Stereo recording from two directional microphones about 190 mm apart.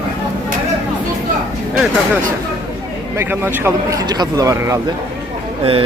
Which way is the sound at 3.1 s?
10° right (ahead or behind).